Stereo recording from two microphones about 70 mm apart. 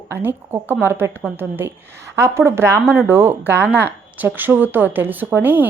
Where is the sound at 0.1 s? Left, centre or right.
Right.